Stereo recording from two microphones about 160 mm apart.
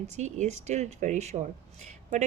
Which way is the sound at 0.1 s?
45° right (ahead or behind).